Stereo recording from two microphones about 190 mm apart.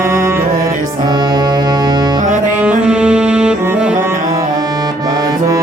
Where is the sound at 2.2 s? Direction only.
40° right (ahead or behind).